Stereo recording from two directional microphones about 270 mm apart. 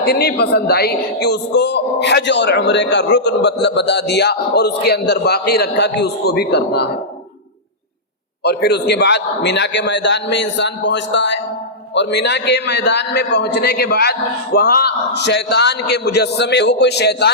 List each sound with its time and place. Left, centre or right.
0.0 s speech: left
8.4 s speech: left